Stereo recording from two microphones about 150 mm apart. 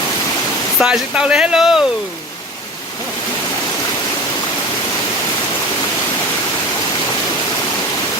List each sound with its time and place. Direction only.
0.8 s speech: 5° right (ahead or behind)